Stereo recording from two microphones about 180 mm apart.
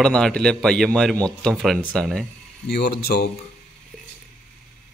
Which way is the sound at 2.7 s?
65° left (ahead or behind).